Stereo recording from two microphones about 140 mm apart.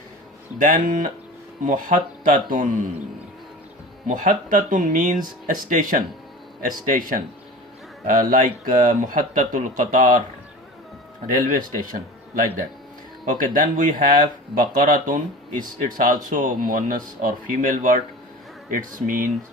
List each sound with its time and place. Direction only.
0.6 s speech: 75° right (ahead or behind)
4.0 s speech: 75° right (ahead or behind)
11.3 s speech: 75° right (ahead or behind)